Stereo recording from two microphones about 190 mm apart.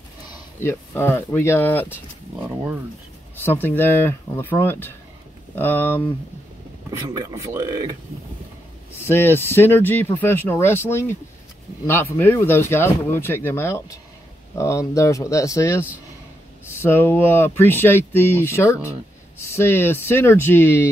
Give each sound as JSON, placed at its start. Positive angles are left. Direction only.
{"t": 0.6, "sound": "speech", "side_deg": 15}
{"t": 3.3, "sound": "speech", "side_deg": 10}
{"t": 6.9, "sound": "speech", "side_deg": -20}
{"t": 9.0, "sound": "speech", "side_deg": 10}